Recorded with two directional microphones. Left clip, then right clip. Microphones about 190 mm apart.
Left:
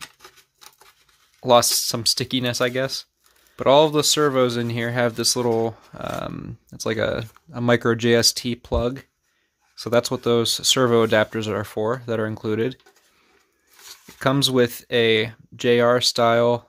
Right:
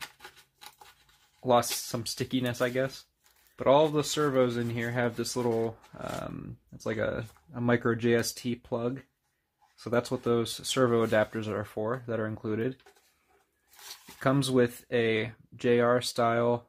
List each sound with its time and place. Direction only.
0.0 s a sound: 5° left (ahead or behind)
1.4 s speech: 45° left (ahead or behind)
14.1 s speech: 45° left (ahead or behind)